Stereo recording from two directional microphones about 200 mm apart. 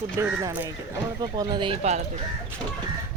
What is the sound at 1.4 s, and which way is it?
Speech, 20° right (ahead or behind).